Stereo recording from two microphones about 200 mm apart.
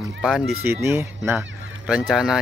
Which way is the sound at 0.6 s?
15° right (ahead or behind).